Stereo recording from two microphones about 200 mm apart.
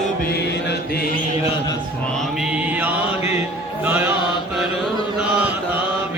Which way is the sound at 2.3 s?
5° right (ahead or behind).